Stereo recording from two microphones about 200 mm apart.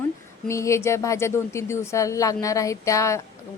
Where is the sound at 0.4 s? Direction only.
15° left (ahead or behind).